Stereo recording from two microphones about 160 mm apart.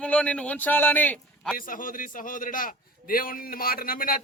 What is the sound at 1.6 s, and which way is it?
A man's voice, 60° left (ahead or behind).